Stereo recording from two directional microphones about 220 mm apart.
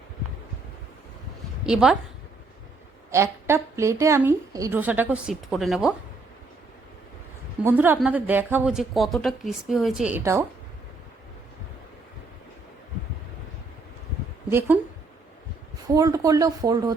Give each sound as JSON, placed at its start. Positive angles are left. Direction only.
{"t": 1.6, "sound": "speech", "side_deg": -5}
{"t": 3.1, "sound": "a woman's voice", "side_deg": -10}
{"t": 7.6, "sound": "speech", "side_deg": -10}
{"t": 15.9, "sound": "a woman's voice", "side_deg": -15}